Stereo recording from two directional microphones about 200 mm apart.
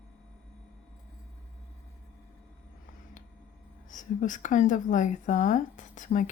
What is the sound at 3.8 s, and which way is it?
Speech, 40° left (ahead or behind).